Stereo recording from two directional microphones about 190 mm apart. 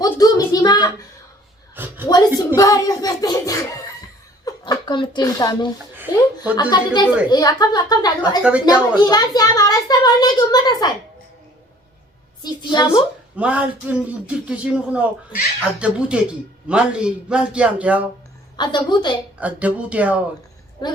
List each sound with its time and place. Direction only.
0.0 s a sound: 20° left (ahead or behind)
1.7 s a sound: 10° right (ahead or behind)
2.0 s a sound: 20° left (ahead or behind)
2.6 s a child's voice: 20° left (ahead or behind)
8.4 s speech: 5° right (ahead or behind)
9.0 s a child's voice: 20° left (ahead or behind)
12.4 s a child's voice: 20° left (ahead or behind)
13.3 s a man's voice: 5° right (ahead or behind)
18.5 s a child's voice: 25° left (ahead or behind)
19.4 s speech: 5° right (ahead or behind)